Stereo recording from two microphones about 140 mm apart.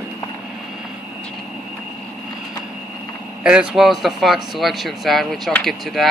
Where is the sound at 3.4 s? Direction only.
5° right (ahead or behind).